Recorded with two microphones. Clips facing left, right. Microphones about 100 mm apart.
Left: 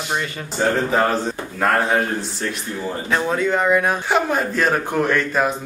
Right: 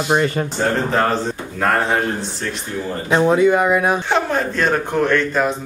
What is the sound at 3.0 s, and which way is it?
Speech, 25° right (ahead or behind).